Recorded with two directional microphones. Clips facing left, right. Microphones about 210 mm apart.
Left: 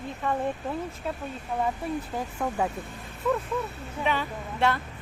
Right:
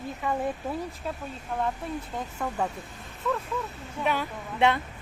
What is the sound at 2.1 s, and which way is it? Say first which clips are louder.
Speech: even; 5° left (ahead or behind).